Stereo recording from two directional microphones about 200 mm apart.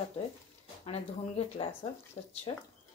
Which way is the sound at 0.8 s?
30° left (ahead or behind).